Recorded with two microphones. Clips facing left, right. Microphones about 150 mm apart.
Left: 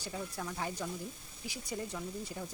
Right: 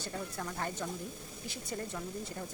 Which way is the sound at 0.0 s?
10° left (ahead or behind).